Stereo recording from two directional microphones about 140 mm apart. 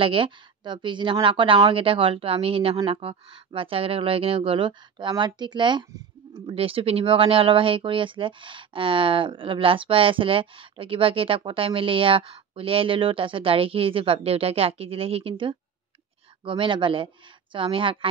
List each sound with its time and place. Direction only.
0.0 s speech: 40° right (ahead or behind)